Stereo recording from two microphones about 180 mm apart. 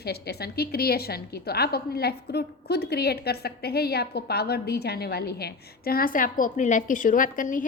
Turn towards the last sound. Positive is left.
turn(degrees=45)  # may be behind; listen again after turning